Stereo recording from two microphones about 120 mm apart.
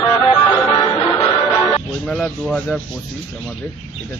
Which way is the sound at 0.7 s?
30° left (ahead or behind).